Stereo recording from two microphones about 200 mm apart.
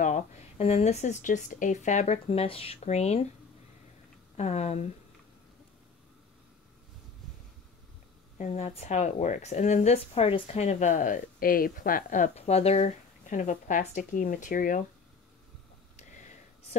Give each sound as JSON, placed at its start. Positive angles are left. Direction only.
{"t": 0.0, "sound": "a woman's voice", "side_deg": 35}
{"t": 4.4, "sound": "a woman's voice", "side_deg": 35}
{"t": 8.4, "sound": "a woman's voice", "side_deg": 35}
{"t": 16.0, "sound": "a sound", "side_deg": 35}